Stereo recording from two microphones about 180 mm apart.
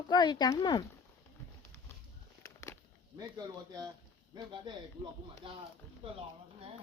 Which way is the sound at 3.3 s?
20° right (ahead or behind).